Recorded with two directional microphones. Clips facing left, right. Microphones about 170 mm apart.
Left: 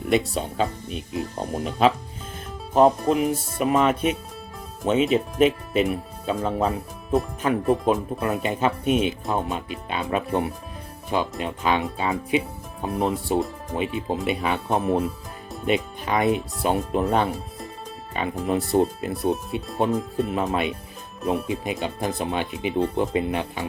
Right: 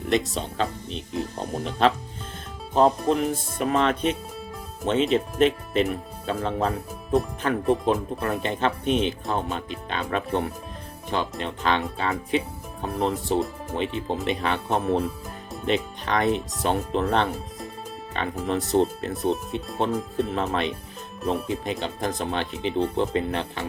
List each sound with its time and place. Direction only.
0.1 s speech: 10° left (ahead or behind)